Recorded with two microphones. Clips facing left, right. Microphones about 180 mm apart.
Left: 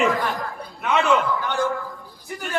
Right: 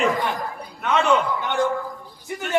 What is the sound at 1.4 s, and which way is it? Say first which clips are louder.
Speech: right 1 dB; 20° right (ahead or behind).